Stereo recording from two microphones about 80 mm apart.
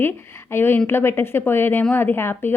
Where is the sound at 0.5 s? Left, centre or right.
Left.